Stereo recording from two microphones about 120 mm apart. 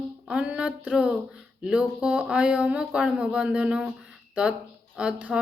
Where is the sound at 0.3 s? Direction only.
10° right (ahead or behind).